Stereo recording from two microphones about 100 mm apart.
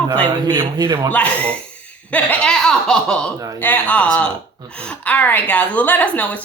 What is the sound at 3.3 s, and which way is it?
Speech, 35° right (ahead or behind).